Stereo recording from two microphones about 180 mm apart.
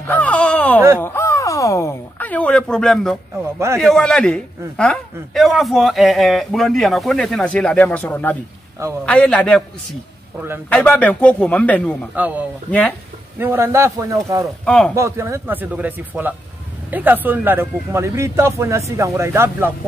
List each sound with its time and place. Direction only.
0.1 s a sound: 5° left (ahead or behind)
3.5 s speech: 15° right (ahead or behind)
3.8 s a man's voice: 5° left (ahead or behind)
10.7 s speech: 10° left (ahead or behind)
12.2 s speech: 10° right (ahead or behind)
14.6 s a man's voice: 5° left (ahead or behind)
15.0 s speech: 15° right (ahead or behind)